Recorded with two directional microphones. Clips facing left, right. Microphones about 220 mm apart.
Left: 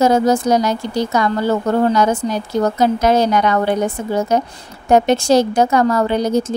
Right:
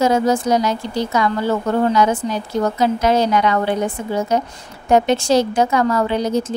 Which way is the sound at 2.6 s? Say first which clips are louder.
Left 2 dB; 45° left (ahead or behind).